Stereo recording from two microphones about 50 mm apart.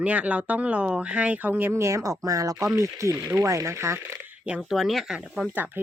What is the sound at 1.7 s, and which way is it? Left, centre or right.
Speech, right.